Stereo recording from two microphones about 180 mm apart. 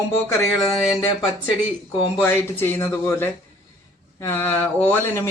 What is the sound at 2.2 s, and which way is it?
Speech, 10° left (ahead or behind).